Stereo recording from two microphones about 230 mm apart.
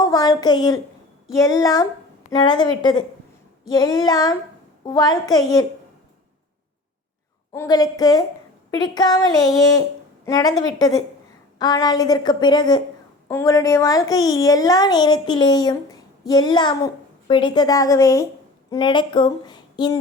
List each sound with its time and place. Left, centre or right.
0.0 s a woman's voice: centre
7.5 s a woman's voice: centre